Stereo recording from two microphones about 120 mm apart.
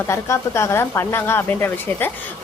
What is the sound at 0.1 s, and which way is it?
A woman's voice, 25° left (ahead or behind).